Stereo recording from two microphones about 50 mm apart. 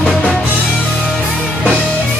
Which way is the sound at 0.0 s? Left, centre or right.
Left.